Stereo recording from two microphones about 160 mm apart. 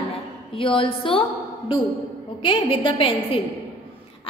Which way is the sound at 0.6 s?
35° left (ahead or behind).